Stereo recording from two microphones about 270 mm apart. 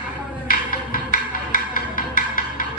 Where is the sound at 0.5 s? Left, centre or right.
Left.